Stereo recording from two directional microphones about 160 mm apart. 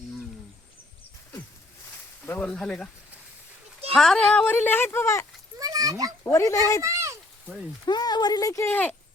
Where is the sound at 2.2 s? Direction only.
10° left (ahead or behind).